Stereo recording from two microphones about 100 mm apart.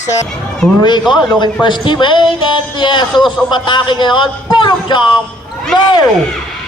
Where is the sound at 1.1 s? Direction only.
50° left (ahead or behind).